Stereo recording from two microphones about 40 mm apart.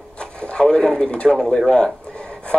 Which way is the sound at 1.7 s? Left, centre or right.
Left.